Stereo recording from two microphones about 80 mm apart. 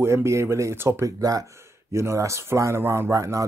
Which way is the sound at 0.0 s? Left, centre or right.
Right.